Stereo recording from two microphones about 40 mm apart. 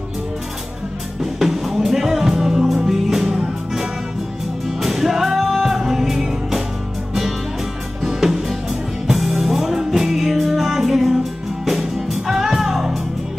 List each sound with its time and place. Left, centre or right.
1.2 s music: centre
4.6 s music: centre
8.0 s music: centre